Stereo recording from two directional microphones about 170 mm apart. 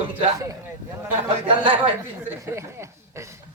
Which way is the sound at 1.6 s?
30° right (ahead or behind).